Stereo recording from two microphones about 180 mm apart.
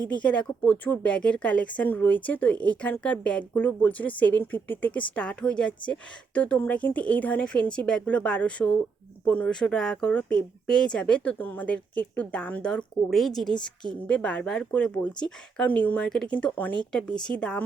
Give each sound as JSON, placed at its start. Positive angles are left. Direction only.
{"t": 0.2, "sound": "speech", "side_deg": 5}